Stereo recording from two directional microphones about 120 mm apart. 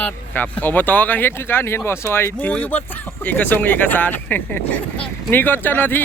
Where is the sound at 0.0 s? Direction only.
15° left (ahead or behind).